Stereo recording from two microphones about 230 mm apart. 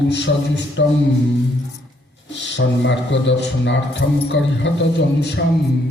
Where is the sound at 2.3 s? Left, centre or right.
Left.